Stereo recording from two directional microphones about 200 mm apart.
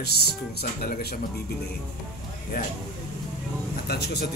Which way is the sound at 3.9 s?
55° left (ahead or behind).